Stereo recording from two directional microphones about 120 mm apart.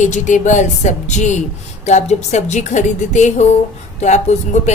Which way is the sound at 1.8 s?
70° left (ahead or behind).